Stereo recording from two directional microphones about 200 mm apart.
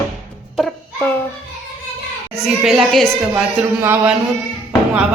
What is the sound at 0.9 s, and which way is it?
Speech, 10° left (ahead or behind).